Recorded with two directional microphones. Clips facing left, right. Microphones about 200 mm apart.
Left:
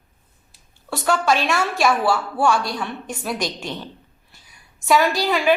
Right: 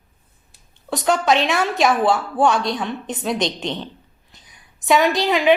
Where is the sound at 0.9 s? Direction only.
20° right (ahead or behind).